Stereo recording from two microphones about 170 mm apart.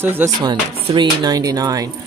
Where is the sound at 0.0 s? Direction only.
15° right (ahead or behind).